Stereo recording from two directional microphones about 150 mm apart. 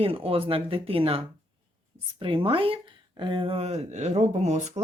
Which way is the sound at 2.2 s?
35° right (ahead or behind).